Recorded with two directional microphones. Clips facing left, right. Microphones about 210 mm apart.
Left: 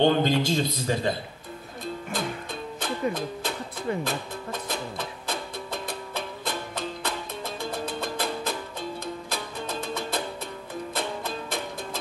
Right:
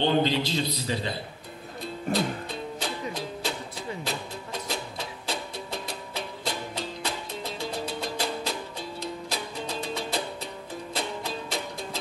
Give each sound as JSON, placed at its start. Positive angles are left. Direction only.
{"t": 0.0, "sound": "a man's voice", "side_deg": 50}
{"t": 2.1, "sound": "music", "side_deg": -35}
{"t": 2.8, "sound": "music", "side_deg": 50}